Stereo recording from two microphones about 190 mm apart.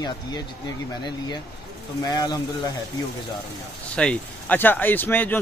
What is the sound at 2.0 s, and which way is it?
Speech, 20° left (ahead or behind).